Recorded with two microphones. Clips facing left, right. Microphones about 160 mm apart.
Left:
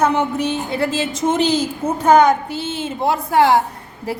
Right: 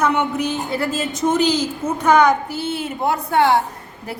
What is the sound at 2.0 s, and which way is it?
Speech, 50° left (ahead or behind).